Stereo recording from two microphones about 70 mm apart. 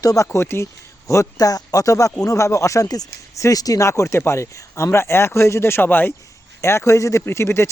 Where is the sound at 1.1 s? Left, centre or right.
Left.